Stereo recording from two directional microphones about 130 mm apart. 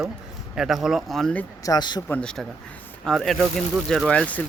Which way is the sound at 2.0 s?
10° left (ahead or behind).